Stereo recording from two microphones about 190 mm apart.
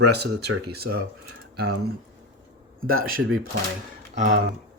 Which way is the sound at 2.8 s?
50° right (ahead or behind).